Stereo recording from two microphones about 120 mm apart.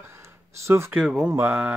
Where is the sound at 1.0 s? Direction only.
5° right (ahead or behind).